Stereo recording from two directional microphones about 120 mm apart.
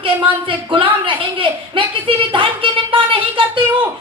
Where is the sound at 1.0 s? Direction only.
45° right (ahead or behind).